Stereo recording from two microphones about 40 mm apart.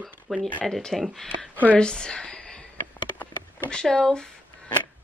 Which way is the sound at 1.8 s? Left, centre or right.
Centre.